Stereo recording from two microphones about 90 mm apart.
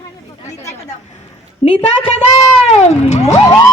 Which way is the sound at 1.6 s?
90° left.